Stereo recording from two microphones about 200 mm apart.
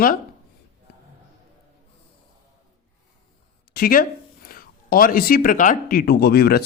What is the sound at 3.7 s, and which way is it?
Speech, 45° left (ahead or behind).